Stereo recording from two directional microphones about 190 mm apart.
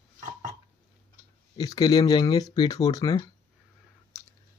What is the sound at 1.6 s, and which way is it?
Speech, 20° left (ahead or behind).